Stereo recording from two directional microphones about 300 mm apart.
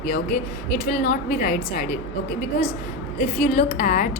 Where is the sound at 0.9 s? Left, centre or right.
Left.